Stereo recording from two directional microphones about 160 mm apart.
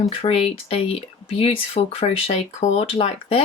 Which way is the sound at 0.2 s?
40° left (ahead or behind).